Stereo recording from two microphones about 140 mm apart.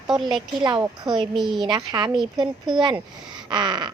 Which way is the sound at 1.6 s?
30° right (ahead or behind).